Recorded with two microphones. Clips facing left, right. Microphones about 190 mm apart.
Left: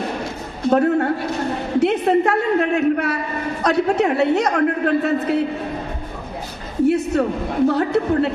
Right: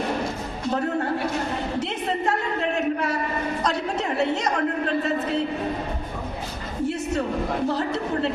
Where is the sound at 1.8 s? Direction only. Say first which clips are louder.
Left 15 dB; 60° left (ahead or behind).